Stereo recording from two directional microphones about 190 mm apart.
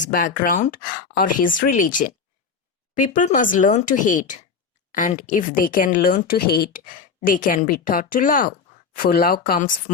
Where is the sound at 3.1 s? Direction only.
45° left (ahead or behind).